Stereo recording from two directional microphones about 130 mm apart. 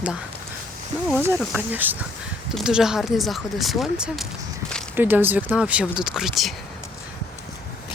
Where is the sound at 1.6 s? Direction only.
15° right (ahead or behind).